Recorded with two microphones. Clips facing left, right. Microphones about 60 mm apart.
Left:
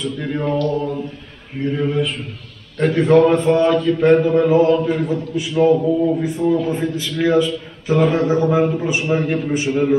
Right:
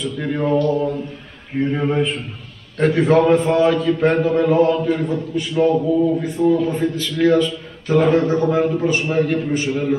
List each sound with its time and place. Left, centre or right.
0.0 s a man's voice: centre
1.6 s a man's voice: right
2.8 s a man's voice: centre